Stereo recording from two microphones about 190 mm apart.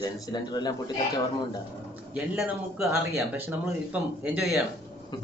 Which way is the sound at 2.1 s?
5° right (ahead or behind).